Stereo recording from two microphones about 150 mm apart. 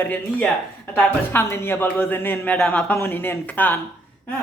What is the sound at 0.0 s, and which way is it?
Speech, 10° left (ahead or behind).